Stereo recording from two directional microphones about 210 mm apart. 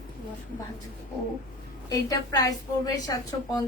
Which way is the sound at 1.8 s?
15° left (ahead or behind).